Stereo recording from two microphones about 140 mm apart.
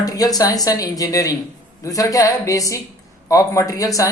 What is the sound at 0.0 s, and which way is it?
Speech, 25° left (ahead or behind).